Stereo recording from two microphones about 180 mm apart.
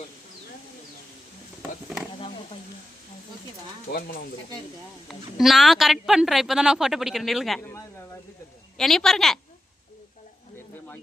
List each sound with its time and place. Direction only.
3.9 s speech: 60° left (ahead or behind)
5.0 s a woman's voice: centre (ahead or behind)
8.8 s a woman's voice: centre (ahead or behind)